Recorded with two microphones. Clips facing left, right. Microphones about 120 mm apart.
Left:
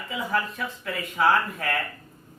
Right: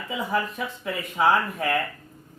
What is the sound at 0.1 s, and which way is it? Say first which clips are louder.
Speech: right 1 dB; 25° right (ahead or behind).